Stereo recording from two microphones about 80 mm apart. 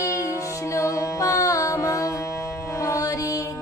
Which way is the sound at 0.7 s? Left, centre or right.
Left.